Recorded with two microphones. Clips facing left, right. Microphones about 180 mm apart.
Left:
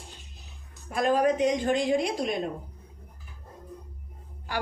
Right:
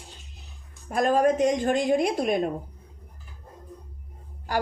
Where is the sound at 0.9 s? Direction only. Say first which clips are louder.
Right 2 dB; 45° right (ahead or behind).